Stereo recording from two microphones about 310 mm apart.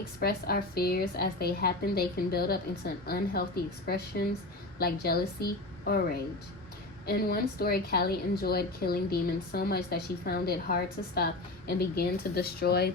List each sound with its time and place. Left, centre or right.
0.2 s a woman's voice: left
7.1 s a woman's voice: left